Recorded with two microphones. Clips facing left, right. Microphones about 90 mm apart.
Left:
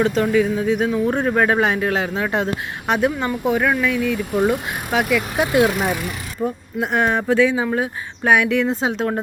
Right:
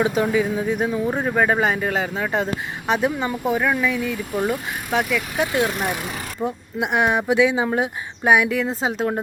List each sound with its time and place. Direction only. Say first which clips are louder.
0.0 s speech: left 2 dB; 15° right (ahead or behind); by 5.5 s centre (ahead or behind)
6.4 s speech: left 2 dB; 15° right (ahead or behind)
8.3 s speech: left 1 dB; 5° right (ahead or behind)